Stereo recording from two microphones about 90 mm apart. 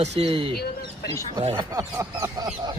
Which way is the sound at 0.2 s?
90° right.